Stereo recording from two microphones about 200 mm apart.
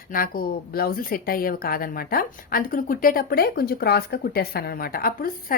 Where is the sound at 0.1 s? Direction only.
45° left (ahead or behind).